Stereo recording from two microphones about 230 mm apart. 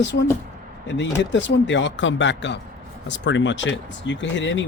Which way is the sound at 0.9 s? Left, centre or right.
Left.